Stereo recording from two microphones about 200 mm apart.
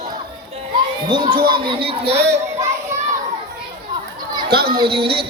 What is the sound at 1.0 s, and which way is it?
Speech, 25° right (ahead or behind).